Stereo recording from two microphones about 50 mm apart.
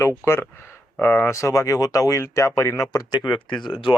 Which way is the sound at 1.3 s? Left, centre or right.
Left.